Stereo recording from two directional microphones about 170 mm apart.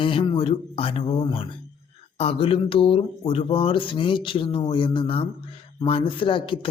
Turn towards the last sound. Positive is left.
turn(degrees=30)  # may be behind; listen again after turning